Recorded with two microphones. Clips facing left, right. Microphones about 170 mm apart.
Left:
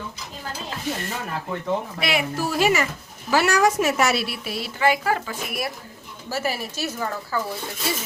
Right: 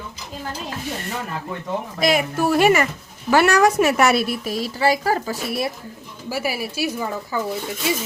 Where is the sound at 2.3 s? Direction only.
60° right (ahead or behind); by 5.7 s 30° right (ahead or behind).